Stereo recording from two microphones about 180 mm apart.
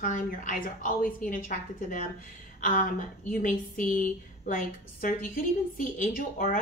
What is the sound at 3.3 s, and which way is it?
Speech, 50° left (ahead or behind).